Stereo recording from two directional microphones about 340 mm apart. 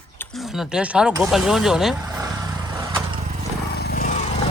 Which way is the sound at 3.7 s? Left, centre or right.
Left.